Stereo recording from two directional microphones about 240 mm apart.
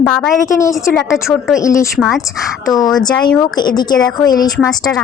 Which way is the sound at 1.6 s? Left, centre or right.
Centre.